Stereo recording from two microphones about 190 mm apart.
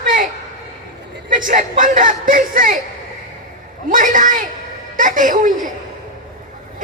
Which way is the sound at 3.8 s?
45° right (ahead or behind).